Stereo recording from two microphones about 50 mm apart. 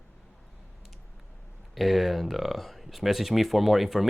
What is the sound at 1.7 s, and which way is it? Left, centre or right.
Speech, centre.